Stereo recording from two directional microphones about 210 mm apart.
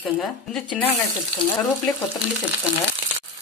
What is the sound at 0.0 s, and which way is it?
Speech, centre (ahead or behind).